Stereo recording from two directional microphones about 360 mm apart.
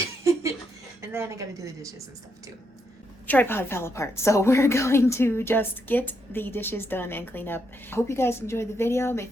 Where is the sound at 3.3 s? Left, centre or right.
Centre.